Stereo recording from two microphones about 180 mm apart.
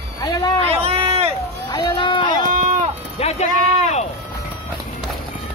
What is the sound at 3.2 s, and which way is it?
Clip-clop, 35° left (ahead or behind).